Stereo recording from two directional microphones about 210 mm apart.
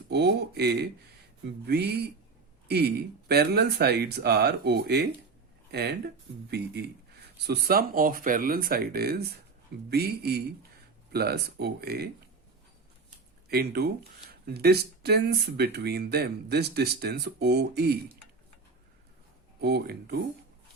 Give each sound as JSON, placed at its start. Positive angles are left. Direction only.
{"t": 0.1, "sound": "speech", "side_deg": -50}
{"t": 7.4, "sound": "speech", "side_deg": -50}
{"t": 13.5, "sound": "speech", "side_deg": -50}
{"t": 19.6, "sound": "speech", "side_deg": -50}